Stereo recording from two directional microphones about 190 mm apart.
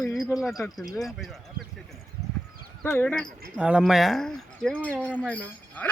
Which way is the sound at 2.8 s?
10° left (ahead or behind).